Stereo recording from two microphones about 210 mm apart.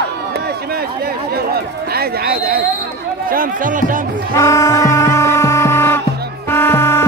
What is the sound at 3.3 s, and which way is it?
Speech, 40° right (ahead or behind).